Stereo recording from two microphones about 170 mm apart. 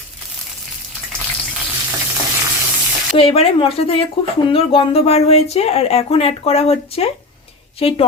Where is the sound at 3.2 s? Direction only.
35° left (ahead or behind).